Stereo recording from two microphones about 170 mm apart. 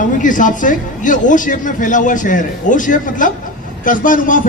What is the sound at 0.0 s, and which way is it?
Speech, 50° left (ahead or behind).